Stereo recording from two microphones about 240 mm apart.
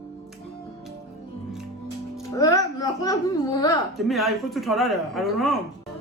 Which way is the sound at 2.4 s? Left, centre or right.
Centre.